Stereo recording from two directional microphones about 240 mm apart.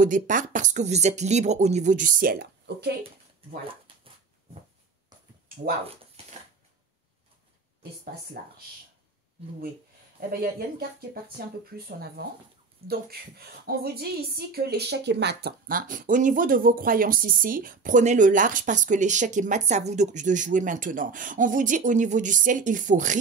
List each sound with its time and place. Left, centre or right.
0.0 s a woman's voice: right
3.6 s dog: right
8.4 s a woman's voice: right
11.3 s a woman's voice: right